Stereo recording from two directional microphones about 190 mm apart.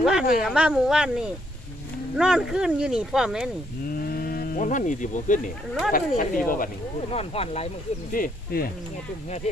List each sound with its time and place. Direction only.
0.0 s speech: 5° right (ahead or behind)
3.8 s speech: 50° left (ahead or behind)
7.1 s speech: 30° left (ahead or behind)
8.1 s speech: 50° left (ahead or behind)